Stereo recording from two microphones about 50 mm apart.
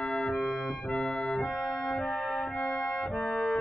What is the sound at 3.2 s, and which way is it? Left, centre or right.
Music, centre.